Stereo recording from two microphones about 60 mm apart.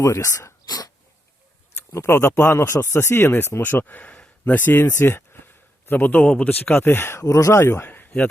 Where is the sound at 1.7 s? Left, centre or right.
Left.